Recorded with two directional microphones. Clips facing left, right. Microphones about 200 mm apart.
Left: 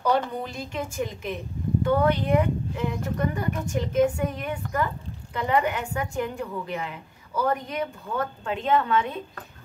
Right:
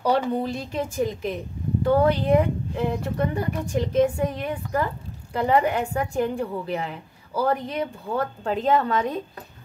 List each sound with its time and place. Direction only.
0.3 s speech: 30° right (ahead or behind)